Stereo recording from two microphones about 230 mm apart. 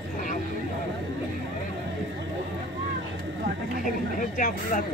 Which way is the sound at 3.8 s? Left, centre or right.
Left.